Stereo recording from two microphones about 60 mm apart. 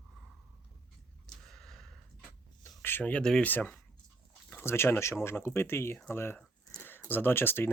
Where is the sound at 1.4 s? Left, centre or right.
Centre.